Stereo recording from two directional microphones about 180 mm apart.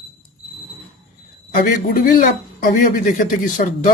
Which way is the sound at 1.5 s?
55° left (ahead or behind).